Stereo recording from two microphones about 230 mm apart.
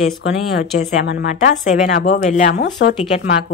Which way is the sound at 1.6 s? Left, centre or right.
Left.